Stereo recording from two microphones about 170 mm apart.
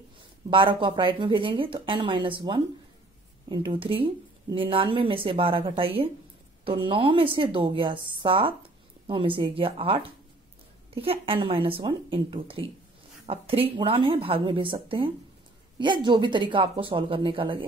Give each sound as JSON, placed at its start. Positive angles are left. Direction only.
{"t": 0.5, "sound": "speech", "side_deg": -30}